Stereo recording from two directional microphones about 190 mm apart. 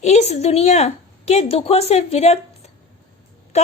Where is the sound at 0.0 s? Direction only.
35° left (ahead or behind).